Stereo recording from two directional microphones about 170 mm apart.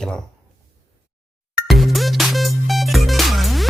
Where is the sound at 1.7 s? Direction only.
Centre (ahead or behind).